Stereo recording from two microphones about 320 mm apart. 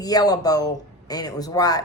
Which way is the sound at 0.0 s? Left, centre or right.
Centre.